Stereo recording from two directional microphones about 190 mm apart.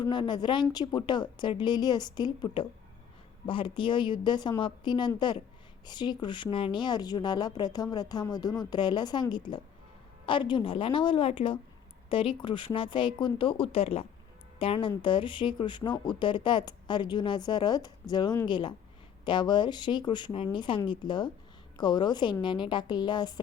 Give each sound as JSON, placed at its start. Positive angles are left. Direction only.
{"t": 0.0, "sound": "speech", "side_deg": 25}